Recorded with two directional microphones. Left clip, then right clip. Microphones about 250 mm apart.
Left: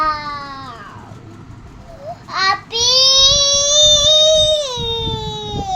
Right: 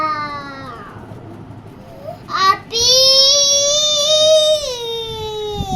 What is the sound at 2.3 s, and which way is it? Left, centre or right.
Child singing, centre.